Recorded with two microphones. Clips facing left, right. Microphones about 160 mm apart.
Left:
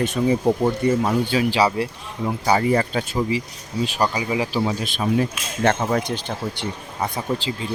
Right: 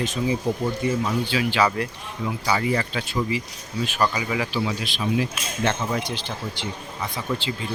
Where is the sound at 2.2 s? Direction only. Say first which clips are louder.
Left 5 dB; 40° left (ahead or behind).